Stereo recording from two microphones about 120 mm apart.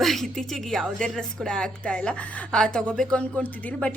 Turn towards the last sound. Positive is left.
turn(degrees=10)  # may be behind; listen again after turning